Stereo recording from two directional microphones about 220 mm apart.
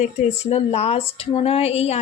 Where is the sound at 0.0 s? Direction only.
30° left (ahead or behind).